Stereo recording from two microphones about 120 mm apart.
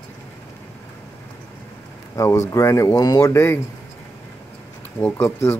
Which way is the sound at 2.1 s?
25° left (ahead or behind).